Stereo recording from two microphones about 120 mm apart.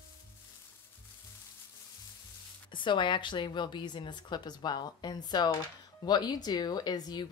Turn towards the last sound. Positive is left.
turn(degrees=35)  # may be behind; listen again after turning